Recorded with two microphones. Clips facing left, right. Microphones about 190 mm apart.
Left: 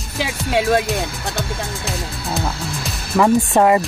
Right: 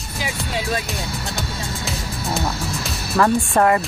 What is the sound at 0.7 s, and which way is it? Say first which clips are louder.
Speech: left 7 dB; 55° left (ahead or behind).